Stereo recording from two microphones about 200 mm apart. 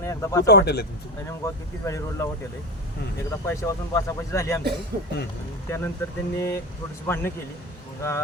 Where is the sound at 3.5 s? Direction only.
15° left (ahead or behind).